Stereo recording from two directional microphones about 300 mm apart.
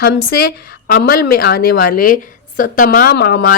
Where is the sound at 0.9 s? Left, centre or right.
Left.